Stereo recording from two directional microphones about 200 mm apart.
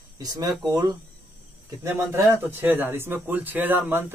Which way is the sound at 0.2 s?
20° right (ahead or behind).